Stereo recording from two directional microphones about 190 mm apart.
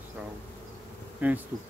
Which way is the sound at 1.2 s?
10° right (ahead or behind).